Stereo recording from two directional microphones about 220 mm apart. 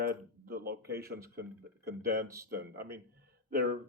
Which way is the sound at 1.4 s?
45° right (ahead or behind).